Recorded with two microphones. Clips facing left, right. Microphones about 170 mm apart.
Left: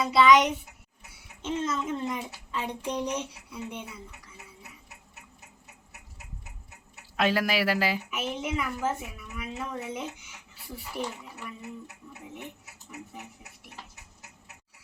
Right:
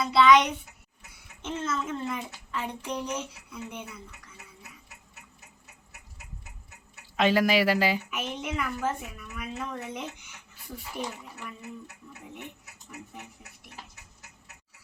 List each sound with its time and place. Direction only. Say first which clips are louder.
0.0 s speech: even; 10° left (ahead or behind)
1.1 s a sound: left 3 dB; 10° left (ahead or behind)
1.6 s speech: right 1 dB; 10° left (ahead or behind)
2.5 s child singing: left 2 dB; 15° left (ahead or behind)
3.0 s speech: left 2 dB; 15° left (ahead or behind)
7.2 s a woman's voice: right 3 dB; centre (ahead or behind)